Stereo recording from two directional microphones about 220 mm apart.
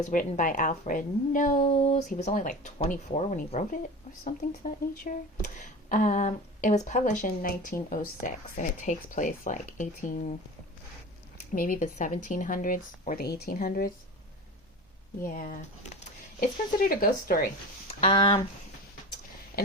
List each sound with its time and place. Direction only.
0.1 s speech: 35° left (ahead or behind)
5.1 s speech: 35° left (ahead or behind)
11.5 s speech: 40° left (ahead or behind)
15.3 s speech: 35° left (ahead or behind)
18.0 s speech: 25° left (ahead or behind)